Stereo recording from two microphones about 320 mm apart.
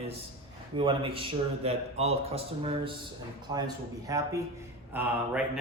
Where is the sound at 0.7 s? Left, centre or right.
Centre.